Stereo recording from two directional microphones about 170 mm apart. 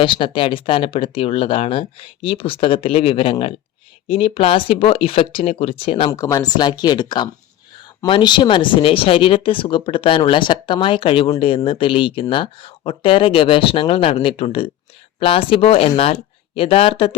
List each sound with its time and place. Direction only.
0.0 s speech: 30° left (ahead or behind)
6.1 s a woman's voice: 20° left (ahead or behind); by 17.2 s 35° left (ahead or behind)